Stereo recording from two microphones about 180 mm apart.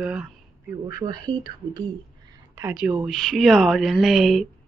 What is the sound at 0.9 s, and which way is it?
Speech, 20° right (ahead or behind).